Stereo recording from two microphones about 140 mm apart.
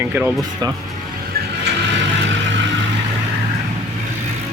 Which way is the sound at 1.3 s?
90° right.